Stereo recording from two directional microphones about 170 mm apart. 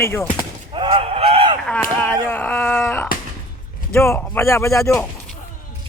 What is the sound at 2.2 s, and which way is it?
Dog, 10° left (ahead or behind).